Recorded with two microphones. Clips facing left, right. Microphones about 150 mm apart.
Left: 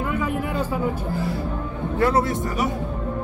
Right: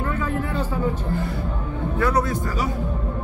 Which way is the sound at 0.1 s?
10° left (ahead or behind).